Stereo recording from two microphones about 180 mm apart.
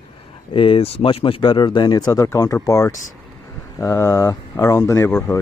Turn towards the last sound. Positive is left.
turn(degrees=15)  # may be behind; listen again after turning